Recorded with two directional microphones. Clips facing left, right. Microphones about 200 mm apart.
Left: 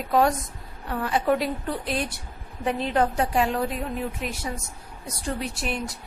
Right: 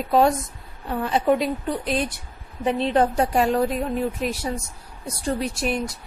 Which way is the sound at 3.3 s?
40° right (ahead or behind).